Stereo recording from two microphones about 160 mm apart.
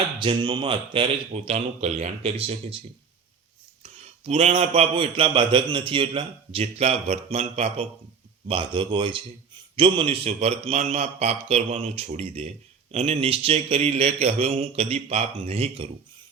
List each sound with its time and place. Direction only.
0.2 s a man's voice: 30° right (ahead or behind)
4.3 s a man's voice: 40° right (ahead or behind)